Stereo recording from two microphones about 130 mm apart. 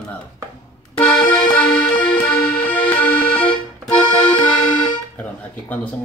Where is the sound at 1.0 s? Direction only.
10° left (ahead or behind).